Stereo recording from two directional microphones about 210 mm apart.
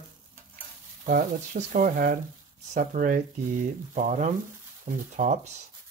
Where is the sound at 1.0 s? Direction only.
40° right (ahead or behind).